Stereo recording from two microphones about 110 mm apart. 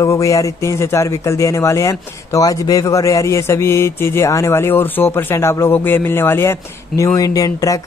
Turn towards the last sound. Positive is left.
turn(degrees=30)  # may be behind; listen again after turning